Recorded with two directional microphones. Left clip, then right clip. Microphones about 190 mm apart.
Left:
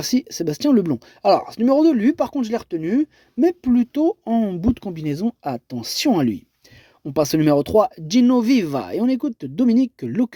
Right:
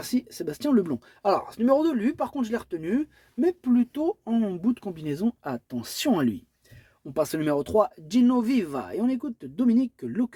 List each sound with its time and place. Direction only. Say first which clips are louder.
0.0 s speech: left 8 dB; 45° left (ahead or behind)
7.1 s speech: left 8 dB; 45° left (ahead or behind)